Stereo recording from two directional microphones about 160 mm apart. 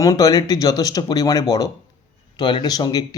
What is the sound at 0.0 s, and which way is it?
Speech, 20° left (ahead or behind).